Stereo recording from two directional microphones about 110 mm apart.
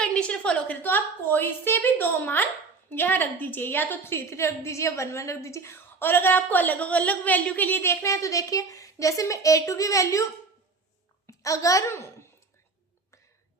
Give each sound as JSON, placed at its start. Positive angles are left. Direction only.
{"t": 0.0, "sound": "a woman's voice", "side_deg": 10}
{"t": 11.3, "sound": "a child's voice", "side_deg": 30}